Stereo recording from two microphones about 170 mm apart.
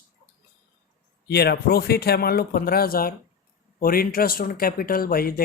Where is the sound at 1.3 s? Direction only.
70° left (ahead or behind).